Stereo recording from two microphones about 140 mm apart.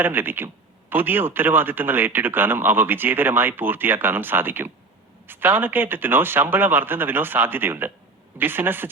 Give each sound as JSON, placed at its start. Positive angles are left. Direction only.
{"t": 0.0, "sound": "speech", "side_deg": -15}